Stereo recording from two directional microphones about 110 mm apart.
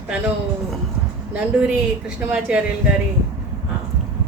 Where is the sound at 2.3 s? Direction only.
10° right (ahead or behind).